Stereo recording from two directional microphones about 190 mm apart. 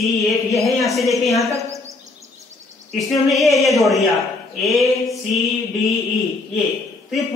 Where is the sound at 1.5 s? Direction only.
15° right (ahead or behind).